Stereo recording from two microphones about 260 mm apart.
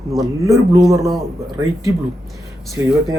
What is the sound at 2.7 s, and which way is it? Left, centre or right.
Speech, centre.